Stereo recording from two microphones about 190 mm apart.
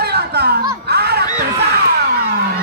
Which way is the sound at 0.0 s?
60° right (ahead or behind).